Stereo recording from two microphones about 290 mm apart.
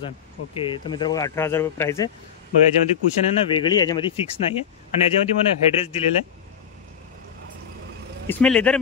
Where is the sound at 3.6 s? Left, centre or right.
Centre.